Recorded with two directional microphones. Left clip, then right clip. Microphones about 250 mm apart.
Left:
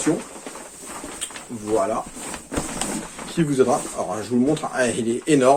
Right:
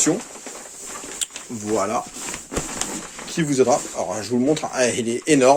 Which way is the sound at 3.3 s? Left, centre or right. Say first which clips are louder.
Right 1 dB; right.